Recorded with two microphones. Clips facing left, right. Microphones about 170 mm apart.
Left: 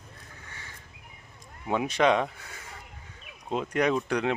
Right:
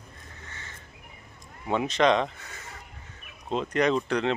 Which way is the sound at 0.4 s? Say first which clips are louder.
Right 2 dB; 10° left (ahead or behind).